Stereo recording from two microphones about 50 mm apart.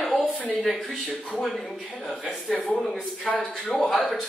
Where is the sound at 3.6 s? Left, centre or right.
Centre.